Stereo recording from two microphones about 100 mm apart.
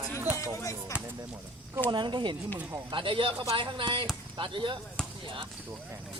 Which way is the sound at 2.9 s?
60° right (ahead or behind).